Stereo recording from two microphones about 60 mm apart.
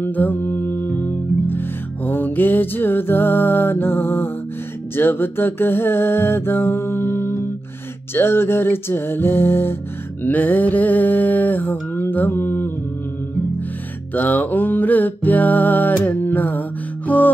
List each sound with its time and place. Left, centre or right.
0.0 s music: left
10.2 s music: left
14.1 s music: left